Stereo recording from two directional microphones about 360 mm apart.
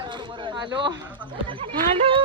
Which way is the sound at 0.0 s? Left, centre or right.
Centre.